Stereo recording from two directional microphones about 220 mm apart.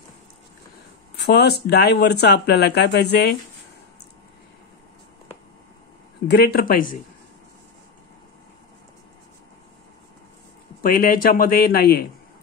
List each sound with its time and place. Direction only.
1.1 s speech: 50° left (ahead or behind)
6.2 s speech: 45° left (ahead or behind)
10.8 s speech: 40° left (ahead or behind)